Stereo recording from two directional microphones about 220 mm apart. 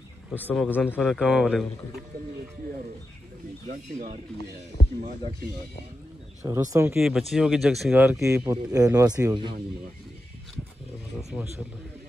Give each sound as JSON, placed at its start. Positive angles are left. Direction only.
{"t": 0.5, "sound": "a man's voice", "side_deg": 10}
{"t": 3.6, "sound": "speech", "side_deg": -35}
{"t": 6.4, "sound": "speech", "side_deg": -15}
{"t": 7.0, "sound": "speech", "side_deg": 0}